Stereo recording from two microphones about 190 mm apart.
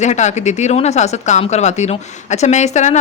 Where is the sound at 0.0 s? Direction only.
35° left (ahead or behind).